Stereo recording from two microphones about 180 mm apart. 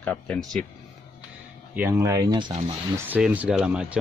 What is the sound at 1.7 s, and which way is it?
Speech, 10° right (ahead or behind).